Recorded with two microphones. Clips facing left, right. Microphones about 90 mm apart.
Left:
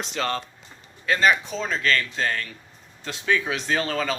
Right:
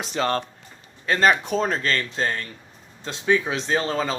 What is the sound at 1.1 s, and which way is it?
Speech, 40° right (ahead or behind).